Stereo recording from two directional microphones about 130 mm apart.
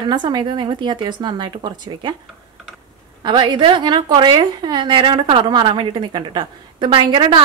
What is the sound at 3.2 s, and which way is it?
A woman's voice, 35° right (ahead or behind).